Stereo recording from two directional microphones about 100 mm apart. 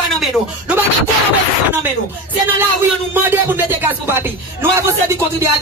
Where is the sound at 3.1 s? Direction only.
20° right (ahead or behind).